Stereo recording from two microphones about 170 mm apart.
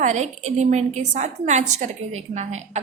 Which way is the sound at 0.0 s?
45° right (ahead or behind).